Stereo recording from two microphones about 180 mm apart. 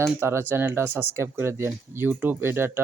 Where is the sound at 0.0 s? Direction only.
15° right (ahead or behind).